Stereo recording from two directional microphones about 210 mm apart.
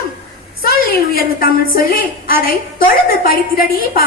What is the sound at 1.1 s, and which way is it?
A woman's voice, 45° left (ahead or behind).